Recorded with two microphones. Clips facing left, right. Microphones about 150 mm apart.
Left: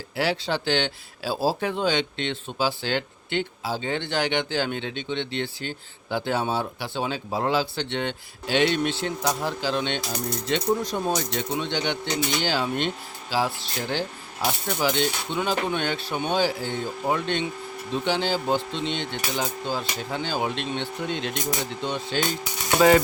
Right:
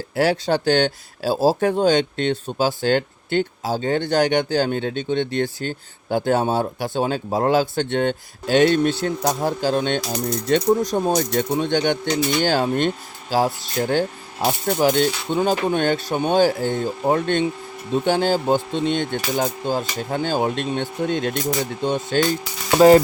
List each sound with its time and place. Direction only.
0.2 s speech: 45° right (ahead or behind)